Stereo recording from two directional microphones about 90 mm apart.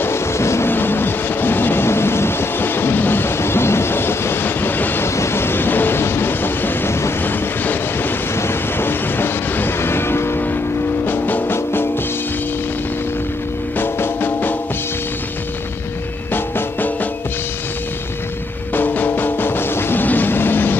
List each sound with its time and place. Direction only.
0.0 s vehicle: 30° left (ahead or behind)
11.1 s music: 20° left (ahead or behind)
13.7 s music: 25° left (ahead or behind)
16.3 s music: 20° left (ahead or behind)
18.7 s music: 20° left (ahead or behind)